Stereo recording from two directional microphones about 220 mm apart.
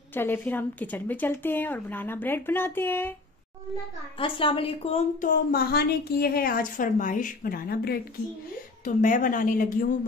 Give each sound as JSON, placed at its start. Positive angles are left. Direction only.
{"t": 0.1, "sound": "a woman's voice", "side_deg": 10}
{"t": 4.2, "sound": "a woman's voice", "side_deg": 25}